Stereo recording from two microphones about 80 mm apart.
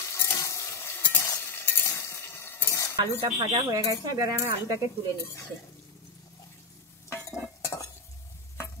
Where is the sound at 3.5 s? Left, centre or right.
Right.